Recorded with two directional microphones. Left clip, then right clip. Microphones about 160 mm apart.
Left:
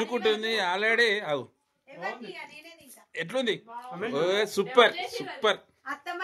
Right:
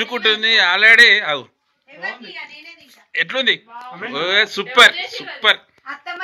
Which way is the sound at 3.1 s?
20° left (ahead or behind).